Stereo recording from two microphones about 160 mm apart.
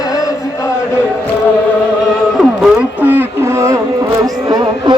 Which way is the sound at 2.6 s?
5° right (ahead or behind).